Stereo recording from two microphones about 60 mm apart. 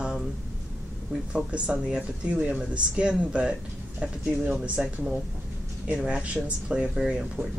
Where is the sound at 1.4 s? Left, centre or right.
Centre.